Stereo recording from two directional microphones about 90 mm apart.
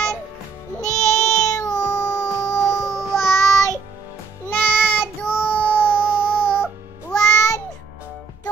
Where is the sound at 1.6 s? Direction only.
10° left (ahead or behind).